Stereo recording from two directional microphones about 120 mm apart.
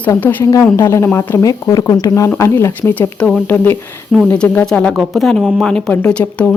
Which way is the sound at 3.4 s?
15° left (ahead or behind).